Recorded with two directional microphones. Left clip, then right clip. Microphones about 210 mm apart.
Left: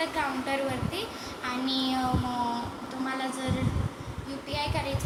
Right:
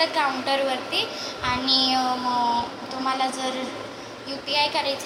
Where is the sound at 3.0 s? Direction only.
20° left (ahead or behind).